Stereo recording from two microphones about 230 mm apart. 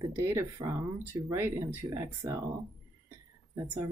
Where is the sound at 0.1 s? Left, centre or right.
Centre.